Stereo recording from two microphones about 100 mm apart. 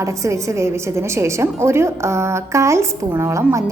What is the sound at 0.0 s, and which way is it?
A woman's voice, 30° right (ahead or behind).